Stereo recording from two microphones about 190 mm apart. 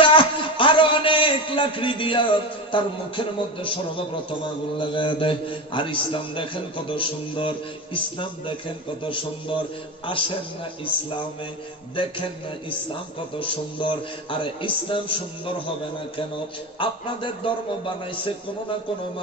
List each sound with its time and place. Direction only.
0.0 s a man's voice: 25° left (ahead or behind)
11.9 s a man's voice: 25° left (ahead or behind)
16.8 s a man's voice: 25° left (ahead or behind)